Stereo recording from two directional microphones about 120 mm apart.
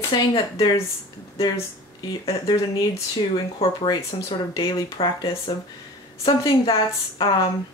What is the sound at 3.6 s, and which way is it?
Speech, 55° left (ahead or behind).